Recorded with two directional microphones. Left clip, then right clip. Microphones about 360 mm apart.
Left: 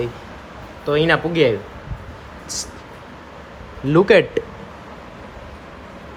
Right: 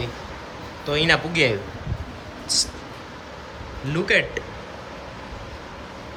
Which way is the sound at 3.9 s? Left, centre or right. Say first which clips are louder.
Left 8 dB; centre.